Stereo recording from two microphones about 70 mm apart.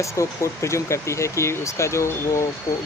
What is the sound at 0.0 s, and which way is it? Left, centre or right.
Speech, left.